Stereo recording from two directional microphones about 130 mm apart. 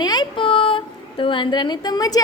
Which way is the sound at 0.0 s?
35° left (ahead or behind).